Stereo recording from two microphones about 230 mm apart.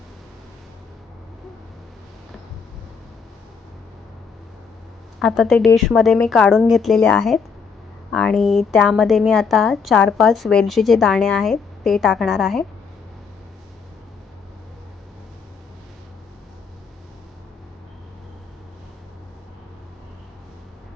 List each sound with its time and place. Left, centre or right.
5.2 s a woman's voice: centre